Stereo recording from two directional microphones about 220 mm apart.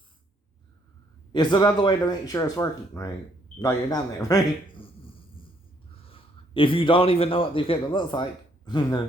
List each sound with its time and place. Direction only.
1.3 s a man's voice: 20° left (ahead or behind)